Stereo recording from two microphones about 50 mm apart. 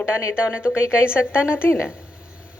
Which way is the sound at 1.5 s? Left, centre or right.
Left.